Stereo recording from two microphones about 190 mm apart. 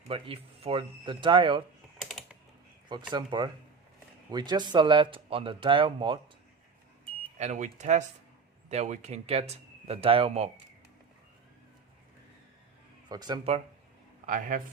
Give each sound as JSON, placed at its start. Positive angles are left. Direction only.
{"t": 0.1, "sound": "speech", "side_deg": -30}
{"t": 2.0, "sound": "typing", "side_deg": 0}
{"t": 3.1, "sound": "speech", "side_deg": -25}
{"t": 7.3, "sound": "speech", "side_deg": -40}
{"t": 13.1, "sound": "speech", "side_deg": -20}
{"t": 14.3, "sound": "a man's voice", "side_deg": -45}